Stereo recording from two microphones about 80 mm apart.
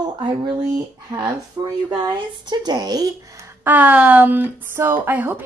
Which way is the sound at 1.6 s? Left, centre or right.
Right.